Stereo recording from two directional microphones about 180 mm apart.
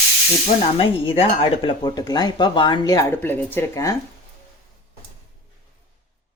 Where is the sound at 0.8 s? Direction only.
30° left (ahead or behind).